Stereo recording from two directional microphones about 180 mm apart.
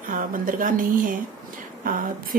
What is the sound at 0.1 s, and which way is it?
Speech, 50° right (ahead or behind).